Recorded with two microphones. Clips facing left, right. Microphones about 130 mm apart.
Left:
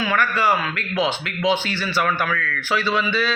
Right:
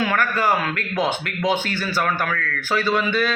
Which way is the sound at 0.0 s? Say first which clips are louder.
Even; 50° right (ahead or behind).